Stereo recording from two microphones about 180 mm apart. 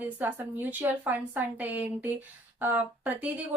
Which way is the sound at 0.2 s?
10° right (ahead or behind).